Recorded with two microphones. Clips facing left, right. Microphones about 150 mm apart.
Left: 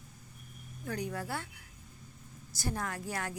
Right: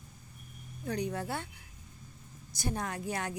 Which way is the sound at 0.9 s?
20° right (ahead or behind).